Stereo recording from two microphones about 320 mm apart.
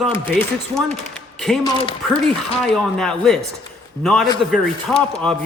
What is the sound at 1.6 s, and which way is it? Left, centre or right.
Speech, centre.